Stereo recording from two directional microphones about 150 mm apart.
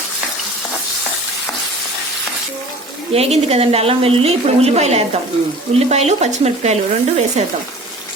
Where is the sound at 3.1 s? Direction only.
45° right (ahead or behind).